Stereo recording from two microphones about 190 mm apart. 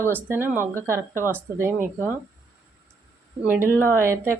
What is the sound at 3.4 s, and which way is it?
Speech, 10° right (ahead or behind).